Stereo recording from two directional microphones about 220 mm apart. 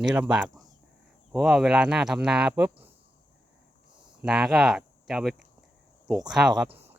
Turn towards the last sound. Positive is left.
turn(degrees=-5)  # may be behind; listen again after turning